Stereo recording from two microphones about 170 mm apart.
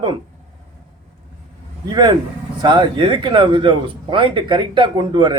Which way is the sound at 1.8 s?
25° right (ahead or behind).